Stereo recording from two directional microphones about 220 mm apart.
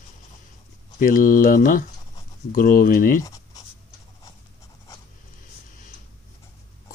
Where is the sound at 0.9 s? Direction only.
40° left (ahead or behind).